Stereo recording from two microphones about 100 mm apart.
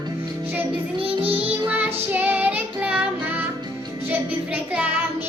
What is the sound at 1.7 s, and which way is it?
Music, 20° right (ahead or behind).